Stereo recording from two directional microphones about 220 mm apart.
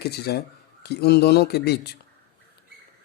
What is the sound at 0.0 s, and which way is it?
Speech, 45° left (ahead or behind).